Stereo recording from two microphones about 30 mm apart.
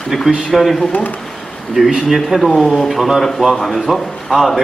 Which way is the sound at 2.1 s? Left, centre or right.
Centre.